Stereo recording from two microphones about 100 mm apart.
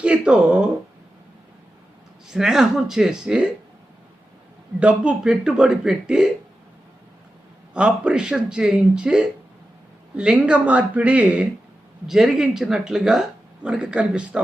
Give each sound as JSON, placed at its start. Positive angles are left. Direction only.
{"t": 0.0, "sound": "speech", "side_deg": -10}
{"t": 2.2, "sound": "a man's voice", "side_deg": -5}
{"t": 4.8, "sound": "a man's voice", "side_deg": -10}
{"t": 7.7, "sound": "a man's voice", "side_deg": -10}